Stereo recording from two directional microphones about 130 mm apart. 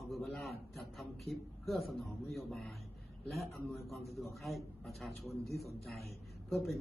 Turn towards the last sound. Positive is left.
turn(degrees=0)  # may be behind; listen again after turning